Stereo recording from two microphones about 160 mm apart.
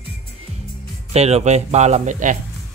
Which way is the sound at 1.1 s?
40° right (ahead or behind).